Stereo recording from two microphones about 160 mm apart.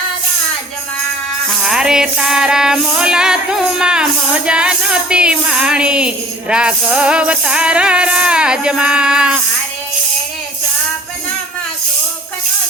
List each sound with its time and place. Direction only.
1.6 s music: 5° right (ahead or behind)